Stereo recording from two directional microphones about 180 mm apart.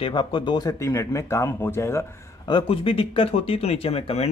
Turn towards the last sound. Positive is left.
turn(degrees=35)  # may be behind; listen again after turning